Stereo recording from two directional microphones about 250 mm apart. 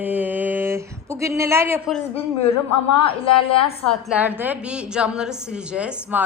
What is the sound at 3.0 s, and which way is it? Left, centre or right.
Speech, left.